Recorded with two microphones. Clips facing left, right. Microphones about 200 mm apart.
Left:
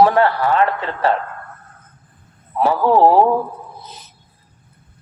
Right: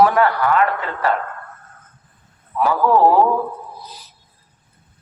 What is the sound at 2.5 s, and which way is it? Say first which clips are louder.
Speech: left 1 dB; 25° left (ahead or behind).